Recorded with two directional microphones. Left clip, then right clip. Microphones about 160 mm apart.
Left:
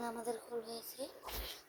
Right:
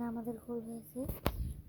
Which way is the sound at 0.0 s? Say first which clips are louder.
Left 1 dB; 15° right (ahead or behind).